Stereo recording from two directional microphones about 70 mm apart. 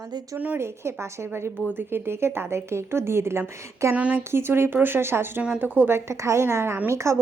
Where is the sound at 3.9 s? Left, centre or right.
Centre.